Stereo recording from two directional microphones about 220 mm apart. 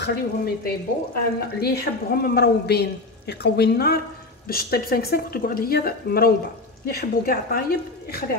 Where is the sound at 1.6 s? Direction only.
45° left (ahead or behind).